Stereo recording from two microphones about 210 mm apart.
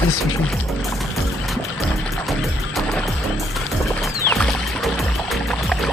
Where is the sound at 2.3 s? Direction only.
Centre (ahead or behind).